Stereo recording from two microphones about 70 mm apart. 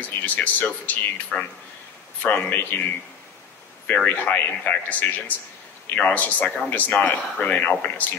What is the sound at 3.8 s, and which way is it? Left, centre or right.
Speech, left.